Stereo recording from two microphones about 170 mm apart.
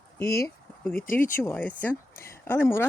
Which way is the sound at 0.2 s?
15° left (ahead or behind).